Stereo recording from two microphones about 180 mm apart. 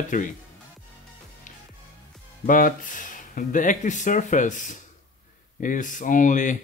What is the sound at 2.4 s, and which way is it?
Speech, 50° left (ahead or behind).